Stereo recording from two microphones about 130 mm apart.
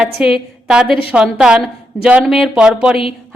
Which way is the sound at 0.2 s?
5° right (ahead or behind).